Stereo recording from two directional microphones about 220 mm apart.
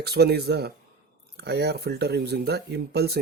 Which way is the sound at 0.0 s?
45° right (ahead or behind).